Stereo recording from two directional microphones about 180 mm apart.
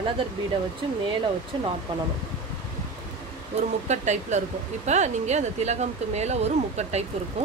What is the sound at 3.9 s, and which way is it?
Speech, 40° right (ahead or behind).